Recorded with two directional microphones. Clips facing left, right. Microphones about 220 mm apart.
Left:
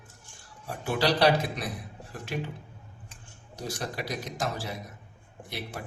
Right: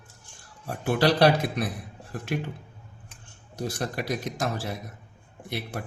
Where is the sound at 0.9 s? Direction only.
55° right (ahead or behind).